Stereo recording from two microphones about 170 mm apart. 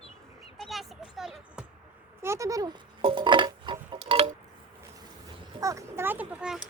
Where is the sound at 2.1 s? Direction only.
15° right (ahead or behind); by 4.3 s 35° right (ahead or behind).